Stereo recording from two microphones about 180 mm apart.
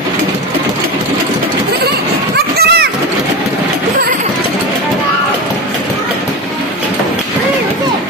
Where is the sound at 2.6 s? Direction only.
65° right (ahead or behind).